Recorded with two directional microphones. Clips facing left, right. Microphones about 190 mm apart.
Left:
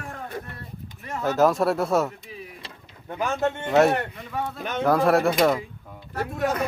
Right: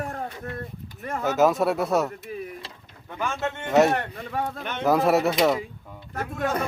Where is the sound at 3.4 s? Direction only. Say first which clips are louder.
Even; centre (ahead or behind).